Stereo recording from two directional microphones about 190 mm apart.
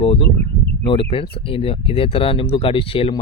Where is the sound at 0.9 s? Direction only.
30° left (ahead or behind).